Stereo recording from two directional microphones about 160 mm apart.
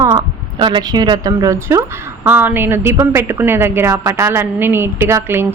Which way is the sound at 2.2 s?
10° right (ahead or behind).